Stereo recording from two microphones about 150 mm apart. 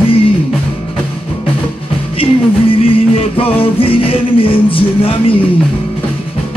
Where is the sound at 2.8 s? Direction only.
40° left (ahead or behind).